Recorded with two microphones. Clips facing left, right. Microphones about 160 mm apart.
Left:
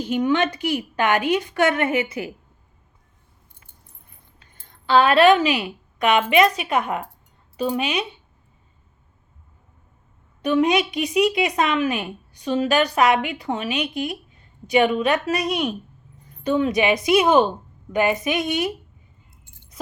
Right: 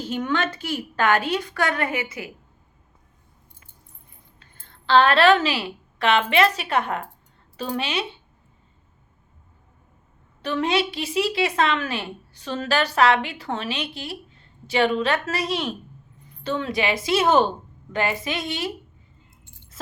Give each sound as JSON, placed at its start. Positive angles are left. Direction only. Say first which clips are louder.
{"t": 0.0, "sound": "speech", "louder": "left 5 dB", "side_deg": 15}
{"t": 4.9, "sound": "speech", "louder": "left 2 dB", "side_deg": 10}
{"t": 10.4, "sound": "a woman's voice", "louder": "left 4 dB", "side_deg": 15}